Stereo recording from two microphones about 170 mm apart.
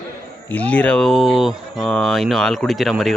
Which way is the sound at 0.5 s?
10° left (ahead or behind).